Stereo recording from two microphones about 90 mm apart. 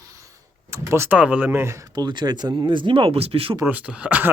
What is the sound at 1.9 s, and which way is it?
Speech, 55° right (ahead or behind).